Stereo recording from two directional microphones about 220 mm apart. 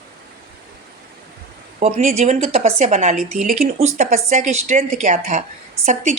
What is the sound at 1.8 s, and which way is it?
A woman's voice, 30° right (ahead or behind).